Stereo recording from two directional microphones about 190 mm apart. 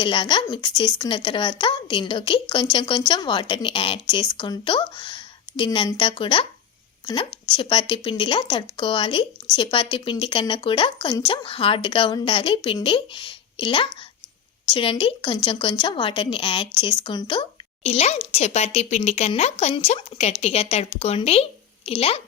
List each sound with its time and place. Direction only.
0.0 s speech: 25° left (ahead or behind)